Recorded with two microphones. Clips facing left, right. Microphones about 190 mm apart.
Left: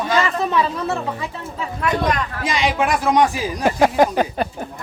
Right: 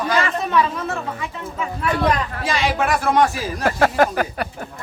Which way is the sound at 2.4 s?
15° left (ahead or behind).